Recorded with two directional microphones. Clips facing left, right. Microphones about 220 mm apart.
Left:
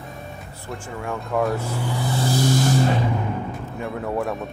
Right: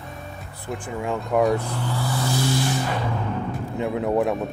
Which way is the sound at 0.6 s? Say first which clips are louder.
Right 4 dB; 15° right (ahead or behind).